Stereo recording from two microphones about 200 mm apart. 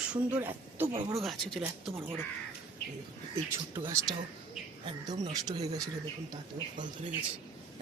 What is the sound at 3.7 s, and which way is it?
Speech, 20° right (ahead or behind).